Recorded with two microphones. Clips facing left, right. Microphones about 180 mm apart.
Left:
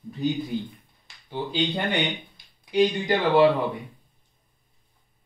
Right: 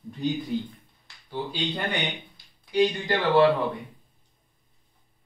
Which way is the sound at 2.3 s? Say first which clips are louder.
Left 1 dB; 15° left (ahead or behind).